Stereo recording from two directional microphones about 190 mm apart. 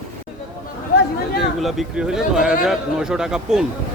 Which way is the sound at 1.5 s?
Centre (ahead or behind).